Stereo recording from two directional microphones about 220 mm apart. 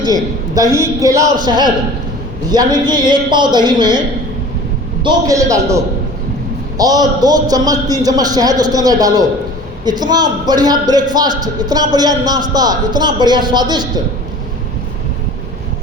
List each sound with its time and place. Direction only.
0.0 s a man's voice: 15° right (ahead or behind)
5.0 s a man's voice: 15° right (ahead or behind)